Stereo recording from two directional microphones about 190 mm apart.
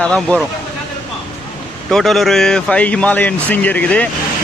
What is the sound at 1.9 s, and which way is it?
Speech, centre (ahead or behind).